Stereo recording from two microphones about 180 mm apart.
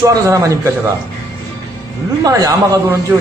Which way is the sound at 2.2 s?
20° right (ahead or behind).